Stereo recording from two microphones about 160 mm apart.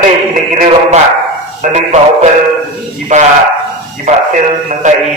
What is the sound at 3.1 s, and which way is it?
A man's voice, 50° right (ahead or behind).